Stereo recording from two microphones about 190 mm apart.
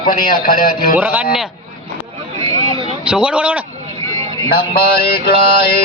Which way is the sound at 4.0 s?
15° left (ahead or behind).